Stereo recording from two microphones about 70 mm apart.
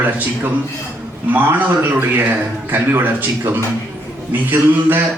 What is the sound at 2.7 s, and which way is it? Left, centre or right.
A man's voice, right.